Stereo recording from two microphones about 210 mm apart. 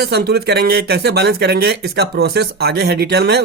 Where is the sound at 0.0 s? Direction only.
50° right (ahead or behind).